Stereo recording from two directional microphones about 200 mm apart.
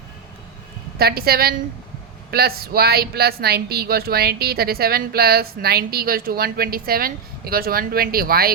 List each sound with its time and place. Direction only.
0.9 s speech: 50° right (ahead or behind)